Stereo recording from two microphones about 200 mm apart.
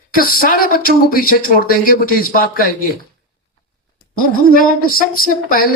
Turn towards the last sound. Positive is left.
turn(degrees=45)  # may be behind; listen again after turning